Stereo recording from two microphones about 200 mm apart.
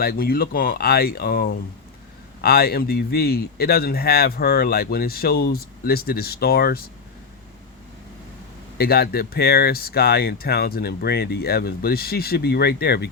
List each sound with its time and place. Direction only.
0.0 s speech: 50° left (ahead or behind)
8.8 s speech: 50° left (ahead or behind)